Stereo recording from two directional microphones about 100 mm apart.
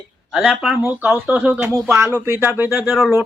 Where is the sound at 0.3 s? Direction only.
10° right (ahead or behind).